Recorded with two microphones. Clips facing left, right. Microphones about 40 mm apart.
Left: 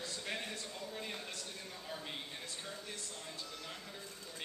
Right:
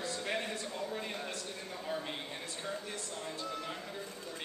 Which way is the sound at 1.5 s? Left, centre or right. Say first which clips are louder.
Right 7 dB; centre.